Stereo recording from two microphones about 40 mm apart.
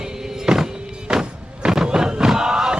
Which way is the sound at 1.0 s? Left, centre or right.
Right.